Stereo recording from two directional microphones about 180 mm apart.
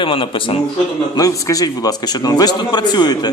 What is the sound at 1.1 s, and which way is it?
Speech, 20° left (ahead or behind).